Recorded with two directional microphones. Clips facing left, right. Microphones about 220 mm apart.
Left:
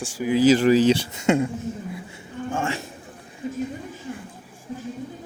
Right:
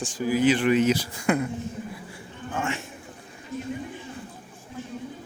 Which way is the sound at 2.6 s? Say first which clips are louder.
Left 2 dB; 35° left (ahead or behind).